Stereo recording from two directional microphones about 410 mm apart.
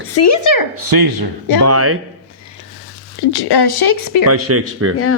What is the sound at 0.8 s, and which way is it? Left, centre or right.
Speech, right.